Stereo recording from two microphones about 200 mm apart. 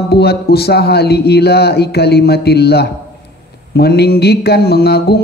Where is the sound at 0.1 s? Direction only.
55° left (ahead or behind).